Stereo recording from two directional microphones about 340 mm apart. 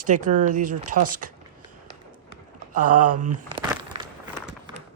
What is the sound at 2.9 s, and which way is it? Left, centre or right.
Speech, right.